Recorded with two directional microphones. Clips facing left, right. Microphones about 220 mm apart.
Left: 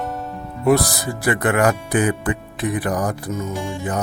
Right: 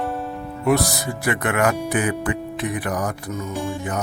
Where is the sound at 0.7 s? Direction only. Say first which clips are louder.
Left 3 dB; 35° left (ahead or behind).